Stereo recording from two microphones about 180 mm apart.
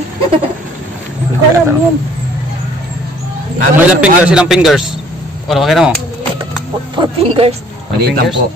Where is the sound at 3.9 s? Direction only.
5° right (ahead or behind).